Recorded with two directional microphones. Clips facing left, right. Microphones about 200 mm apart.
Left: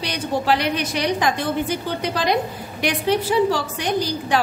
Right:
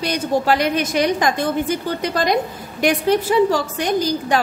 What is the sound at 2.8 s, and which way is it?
A woman's voice, 45° right (ahead or behind).